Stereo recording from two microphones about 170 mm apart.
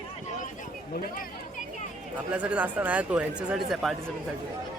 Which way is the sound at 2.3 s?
10° right (ahead or behind).